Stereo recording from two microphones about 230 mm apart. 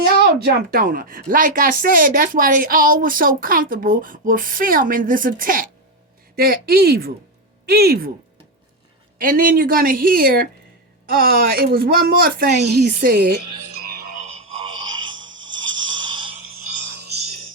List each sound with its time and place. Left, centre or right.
0.0 s a woman's voice: right
9.1 s a woman's voice: right
13.8 s music: right
14.3 s music: right
15.4 s a sound: centre